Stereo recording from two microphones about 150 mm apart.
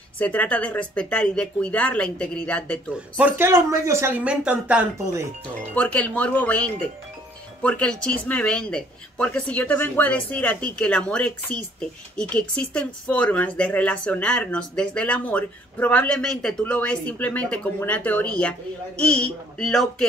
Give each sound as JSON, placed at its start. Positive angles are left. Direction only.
{"t": 0.2, "sound": "speech", "side_deg": 10}
{"t": 3.2, "sound": "speech", "side_deg": -15}
{"t": 4.9, "sound": "speech", "side_deg": -20}
{"t": 5.8, "sound": "speech", "side_deg": 10}